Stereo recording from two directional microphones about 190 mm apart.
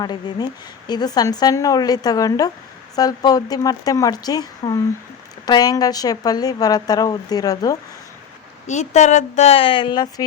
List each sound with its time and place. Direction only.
0.0 s speech: 20° left (ahead or behind)
8.6 s speech: 40° left (ahead or behind); by 10.2 s 20° left (ahead or behind)